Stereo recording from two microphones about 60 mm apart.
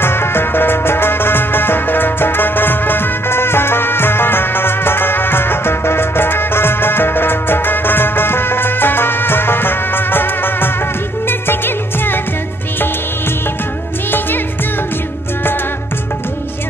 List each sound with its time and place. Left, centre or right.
0.0 s music: left